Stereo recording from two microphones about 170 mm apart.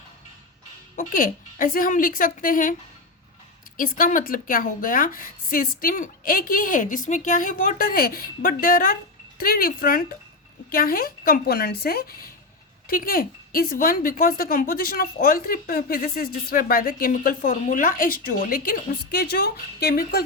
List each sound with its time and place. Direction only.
0.9 s a woman's voice: 55° left (ahead or behind)
3.8 s a woman's voice: 55° left (ahead or behind)